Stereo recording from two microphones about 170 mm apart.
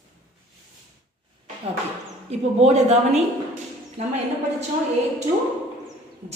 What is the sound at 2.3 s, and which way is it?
A woman's voice, 40° right (ahead or behind).